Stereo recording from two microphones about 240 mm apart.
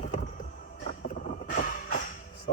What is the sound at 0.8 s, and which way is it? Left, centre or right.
Vehicle, left.